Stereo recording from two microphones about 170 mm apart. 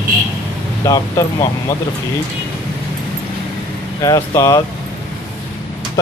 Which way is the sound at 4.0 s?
20° left (ahead or behind).